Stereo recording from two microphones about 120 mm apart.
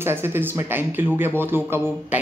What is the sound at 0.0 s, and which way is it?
A woman's voice, 20° right (ahead or behind).